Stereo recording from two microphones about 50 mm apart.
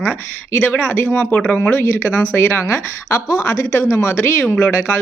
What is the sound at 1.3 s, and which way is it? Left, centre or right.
Speech, left.